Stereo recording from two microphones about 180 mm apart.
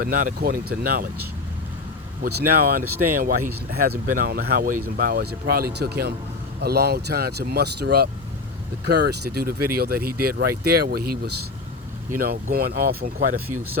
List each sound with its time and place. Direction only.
0.0 s speech: 50° right (ahead or behind)
2.2 s speech: 50° right (ahead or behind)